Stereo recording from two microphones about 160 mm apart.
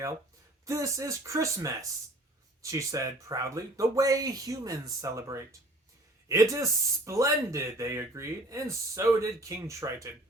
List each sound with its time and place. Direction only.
0.6 s speech: 20° right (ahead or behind)